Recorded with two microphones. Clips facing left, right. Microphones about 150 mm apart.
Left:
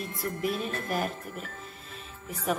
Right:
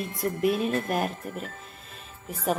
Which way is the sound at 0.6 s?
55° right (ahead or behind).